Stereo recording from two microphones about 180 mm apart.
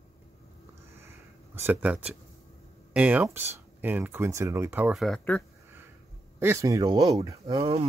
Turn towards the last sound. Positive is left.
turn(degrees=-20)  # may be behind; listen again after turning